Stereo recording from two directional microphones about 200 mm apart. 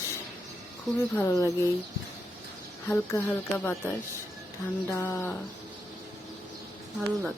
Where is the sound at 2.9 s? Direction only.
10° left (ahead or behind).